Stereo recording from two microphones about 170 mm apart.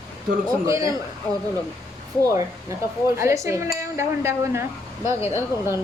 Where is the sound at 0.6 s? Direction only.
20° right (ahead or behind).